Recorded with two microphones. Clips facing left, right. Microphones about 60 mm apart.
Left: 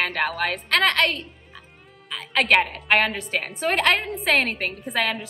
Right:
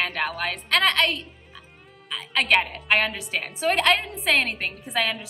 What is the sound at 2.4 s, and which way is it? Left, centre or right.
A woman's voice, left.